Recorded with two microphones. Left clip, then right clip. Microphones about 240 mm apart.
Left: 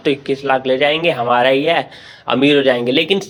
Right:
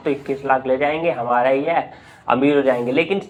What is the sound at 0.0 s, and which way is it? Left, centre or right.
Speech, left.